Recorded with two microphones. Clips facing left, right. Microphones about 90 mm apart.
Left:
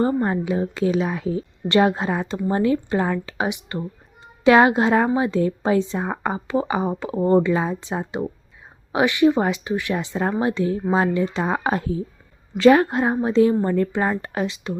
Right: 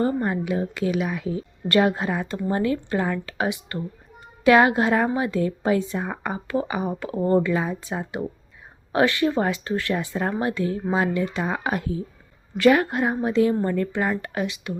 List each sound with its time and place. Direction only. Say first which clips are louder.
0.0 s a woman's voice: left 3 dB; 30° left (ahead or behind)
1.6 s a woman's voice: left 2 dB; 20° left (ahead or behind)